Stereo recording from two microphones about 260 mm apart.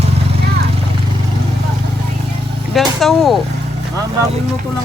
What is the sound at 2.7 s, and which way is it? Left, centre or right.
Vehicle, centre.